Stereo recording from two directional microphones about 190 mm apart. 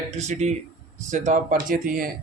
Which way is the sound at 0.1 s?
35° right (ahead or behind).